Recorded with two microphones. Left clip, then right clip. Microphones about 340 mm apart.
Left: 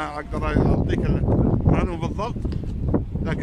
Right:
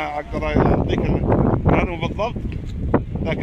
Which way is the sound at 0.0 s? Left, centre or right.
Centre.